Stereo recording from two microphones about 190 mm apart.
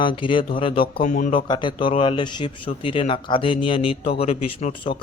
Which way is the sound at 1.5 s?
25° left (ahead or behind).